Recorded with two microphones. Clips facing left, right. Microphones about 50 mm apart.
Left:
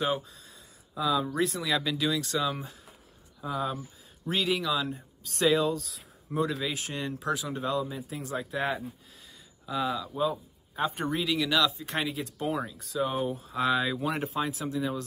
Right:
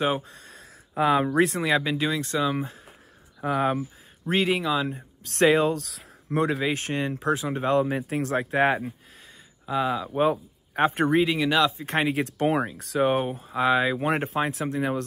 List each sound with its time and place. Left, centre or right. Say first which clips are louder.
0.3 s a sound: right 6 dB; right
0.6 s speech: right 8 dB; right
3.3 s speech: right 7 dB; right
4.3 s speech: right 5 dB; right
5.2 s speech: right 5 dB; right
5.9 s a sound: right 6 dB; right
6.5 s speech: right 7 dB; right
7.7 s speech: right 9 dB; right
9.7 s speech: right 5 dB; right
10.1 s speech: right 6 dB; right
11.2 s speech: right 4 dB; right
12.4 s speech: right 6 dB; right
13.5 s speech: right 6 dB; right